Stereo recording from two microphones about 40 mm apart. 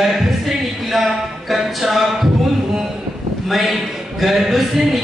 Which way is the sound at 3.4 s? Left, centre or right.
Centre.